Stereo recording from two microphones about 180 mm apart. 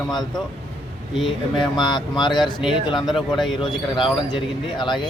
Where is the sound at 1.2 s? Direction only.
25° left (ahead or behind).